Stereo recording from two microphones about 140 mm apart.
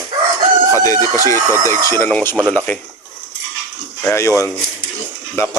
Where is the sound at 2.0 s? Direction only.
10° left (ahead or behind).